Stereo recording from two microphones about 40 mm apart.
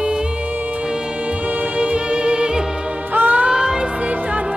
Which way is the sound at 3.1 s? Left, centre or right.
Right.